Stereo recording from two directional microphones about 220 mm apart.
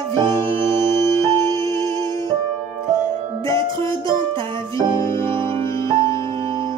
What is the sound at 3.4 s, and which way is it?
Music, 15° left (ahead or behind).